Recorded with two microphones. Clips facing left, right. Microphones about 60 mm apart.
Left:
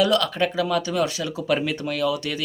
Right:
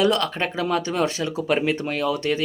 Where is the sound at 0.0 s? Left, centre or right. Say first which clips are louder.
Left 1 dB; right.